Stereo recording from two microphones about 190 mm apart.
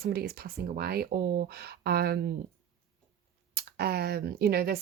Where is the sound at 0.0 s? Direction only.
55° right (ahead or behind).